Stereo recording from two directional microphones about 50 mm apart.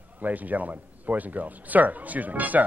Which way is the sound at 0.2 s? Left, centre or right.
Right.